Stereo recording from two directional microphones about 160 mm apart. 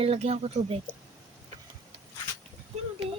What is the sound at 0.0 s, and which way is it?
Speech, 40° right (ahead or behind).